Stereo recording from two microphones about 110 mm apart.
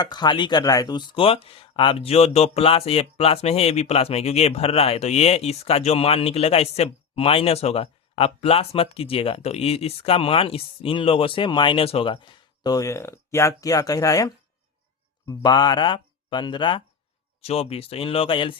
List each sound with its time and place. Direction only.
0.0 s speech: 40° left (ahead or behind)
1.1 s speech: 60° left (ahead or behind)
12.7 s speech: 25° left (ahead or behind); by 16.8 s 45° left (ahead or behind)
17.4 s speech: 70° left (ahead or behind); by 18.5 s 50° left (ahead or behind)